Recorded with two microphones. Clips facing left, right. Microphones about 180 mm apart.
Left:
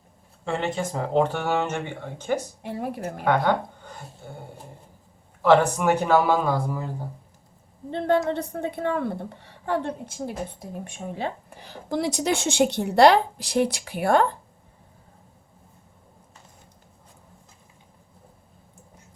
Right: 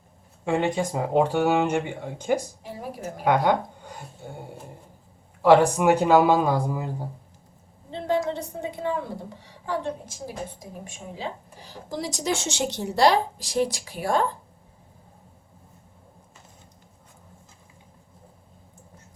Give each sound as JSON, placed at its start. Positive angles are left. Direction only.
{"t": 0.4, "sound": "speech", "side_deg": -15}
{"t": 2.6, "sound": "a woman's voice", "side_deg": 60}
{"t": 3.2, "sound": "speech", "side_deg": -15}
{"t": 5.4, "sound": "speech", "side_deg": -15}
{"t": 7.9, "sound": "a woman's voice", "side_deg": 60}